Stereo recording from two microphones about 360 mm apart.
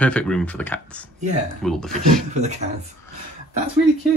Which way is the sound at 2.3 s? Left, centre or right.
Centre.